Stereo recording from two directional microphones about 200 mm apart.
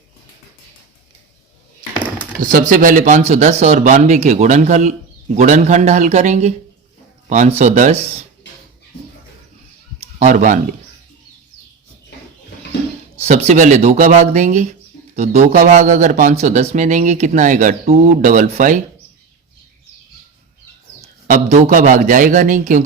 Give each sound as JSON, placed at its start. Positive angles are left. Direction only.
{"t": 2.0, "sound": "a sound", "side_deg": 5}
{"t": 2.4, "sound": "speech", "side_deg": -40}
{"t": 10.0, "sound": "speech", "side_deg": -35}
{"t": 13.1, "sound": "speech", "side_deg": -35}
{"t": 21.2, "sound": "speech", "side_deg": -40}